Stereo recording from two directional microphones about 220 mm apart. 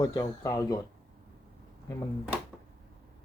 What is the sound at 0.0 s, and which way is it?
Speech, 15° left (ahead or behind).